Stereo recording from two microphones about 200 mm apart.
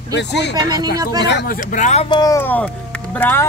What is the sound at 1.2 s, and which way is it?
Speech, 60° left (ahead or behind).